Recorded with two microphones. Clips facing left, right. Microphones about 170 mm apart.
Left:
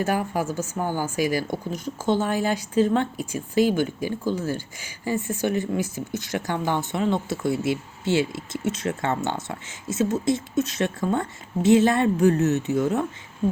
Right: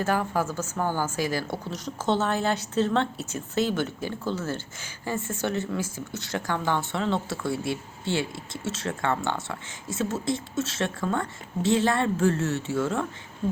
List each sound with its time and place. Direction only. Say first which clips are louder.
0.0 s speech: left 1 dB; 15° left (ahead or behind)